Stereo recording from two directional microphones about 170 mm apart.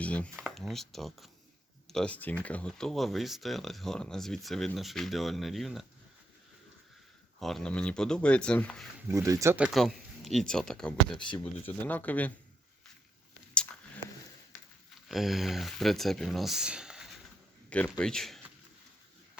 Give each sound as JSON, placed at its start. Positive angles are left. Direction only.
{"t": 0.0, "sound": "speech", "side_deg": 10}
{"t": 0.3, "sound": "speech", "side_deg": -5}
{"t": 7.3, "sound": "speech", "side_deg": 0}
{"t": 9.0, "sound": "speech", "side_deg": -20}
{"t": 9.7, "sound": "speech", "side_deg": 0}
{"t": 13.5, "sound": "a sound", "side_deg": 10}
{"t": 15.1, "sound": "speech", "side_deg": 0}
{"t": 17.7, "sound": "speech", "side_deg": 5}